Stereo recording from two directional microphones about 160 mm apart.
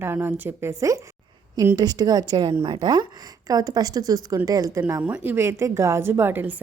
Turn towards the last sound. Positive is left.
turn(degrees=-10)  # may be behind; listen again after turning